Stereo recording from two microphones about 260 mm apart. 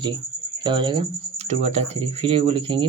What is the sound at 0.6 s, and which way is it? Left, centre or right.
Speech, centre.